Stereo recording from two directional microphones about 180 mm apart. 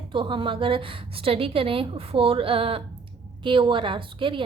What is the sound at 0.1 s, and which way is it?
A woman's voice, 25° right (ahead or behind).